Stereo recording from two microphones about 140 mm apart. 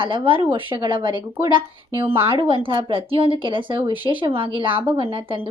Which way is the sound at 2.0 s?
15° right (ahead or behind).